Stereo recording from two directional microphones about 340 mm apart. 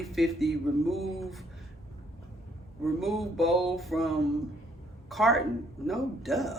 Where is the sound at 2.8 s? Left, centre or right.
Centre.